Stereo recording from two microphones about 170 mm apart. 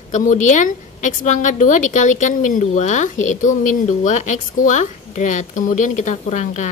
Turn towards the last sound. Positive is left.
turn(degrees=45)  # may be behind; listen again after turning